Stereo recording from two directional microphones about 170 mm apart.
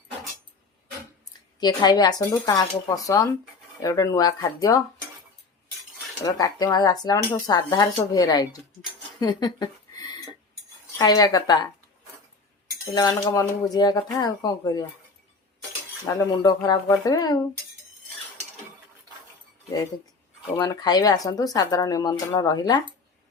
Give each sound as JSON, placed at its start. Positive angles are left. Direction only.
{"t": 1.5, "sound": "speech", "side_deg": 25}
{"t": 6.2, "sound": "speech", "side_deg": 20}
{"t": 9.2, "sound": "a sound", "side_deg": 25}
{"t": 10.9, "sound": "speech", "side_deg": 20}
{"t": 12.9, "sound": "speech", "side_deg": 20}
{"t": 16.0, "sound": "speech", "side_deg": 20}
{"t": 20.6, "sound": "speech", "side_deg": 25}